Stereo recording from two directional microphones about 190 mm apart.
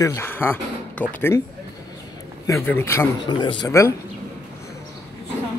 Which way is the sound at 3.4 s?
25° left (ahead or behind).